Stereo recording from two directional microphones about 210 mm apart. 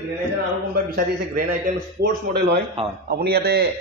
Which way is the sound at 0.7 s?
45° right (ahead or behind).